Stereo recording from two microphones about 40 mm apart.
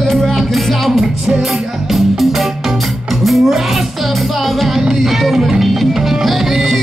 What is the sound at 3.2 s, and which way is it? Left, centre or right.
Music, centre.